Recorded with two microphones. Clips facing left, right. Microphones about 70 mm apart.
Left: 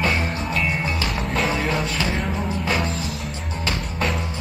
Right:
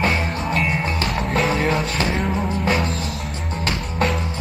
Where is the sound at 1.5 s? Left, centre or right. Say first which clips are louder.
Right 3 dB; right.